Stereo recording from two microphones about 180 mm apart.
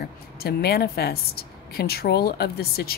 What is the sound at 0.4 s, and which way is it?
Speech, 60° left (ahead or behind).